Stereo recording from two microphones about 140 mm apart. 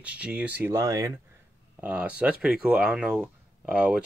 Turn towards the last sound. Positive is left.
turn(degrees=-10)  # may be behind; listen again after turning